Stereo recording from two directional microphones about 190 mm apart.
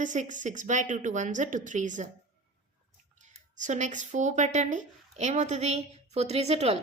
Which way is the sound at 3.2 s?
40° right (ahead or behind).